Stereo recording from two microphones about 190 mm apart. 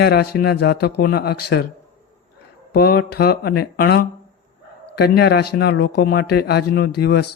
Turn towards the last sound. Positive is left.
turn(degrees=55)  # may be behind; listen again after turning